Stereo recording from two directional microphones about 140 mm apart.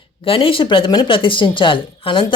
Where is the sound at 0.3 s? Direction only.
40° left (ahead or behind).